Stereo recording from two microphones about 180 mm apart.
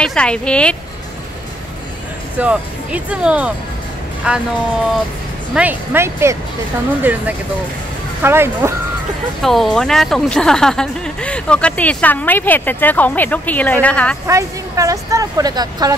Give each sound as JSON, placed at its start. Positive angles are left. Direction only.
{"t": 0.0, "sound": "a woman's voice", "side_deg": 5}
{"t": 2.3, "sound": "a woman's voice", "side_deg": -5}
{"t": 5.5, "sound": "speech", "side_deg": -10}
{"t": 9.4, "sound": "a woman's voice", "side_deg": 0}
{"t": 14.2, "sound": "speech", "side_deg": -15}